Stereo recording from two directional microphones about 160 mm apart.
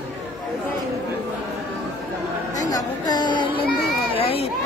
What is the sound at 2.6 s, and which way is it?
Chatter, 20° left (ahead or behind).